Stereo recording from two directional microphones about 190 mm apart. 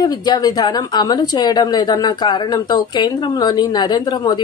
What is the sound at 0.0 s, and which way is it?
A woman's voice, 20° left (ahead or behind).